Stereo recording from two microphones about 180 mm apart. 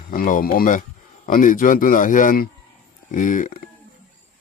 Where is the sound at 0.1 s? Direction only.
50° left (ahead or behind).